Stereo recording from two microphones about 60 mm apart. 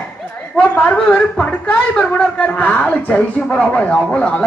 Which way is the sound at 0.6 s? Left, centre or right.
Left.